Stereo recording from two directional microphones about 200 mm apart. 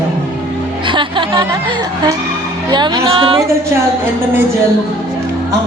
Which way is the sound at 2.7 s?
20° right (ahead or behind).